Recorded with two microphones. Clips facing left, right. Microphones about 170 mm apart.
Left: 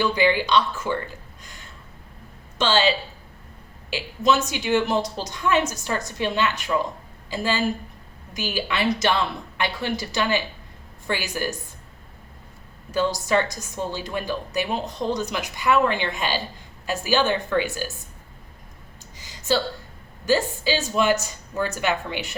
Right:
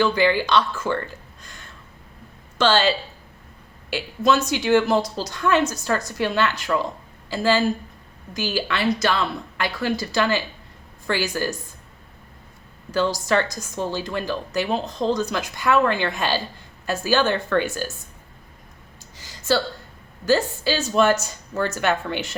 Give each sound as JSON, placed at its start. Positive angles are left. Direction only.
{"t": 0.0, "sound": "a woman's voice", "side_deg": 15}
{"t": 2.6, "sound": "a woman's voice", "side_deg": 20}
{"t": 13.2, "sound": "a woman's voice", "side_deg": 20}
{"t": 19.1, "sound": "a sound", "side_deg": 15}
{"t": 20.2, "sound": "a woman's voice", "side_deg": 15}